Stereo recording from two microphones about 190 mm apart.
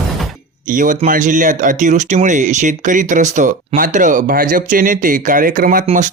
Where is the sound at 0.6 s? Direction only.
45° right (ahead or behind).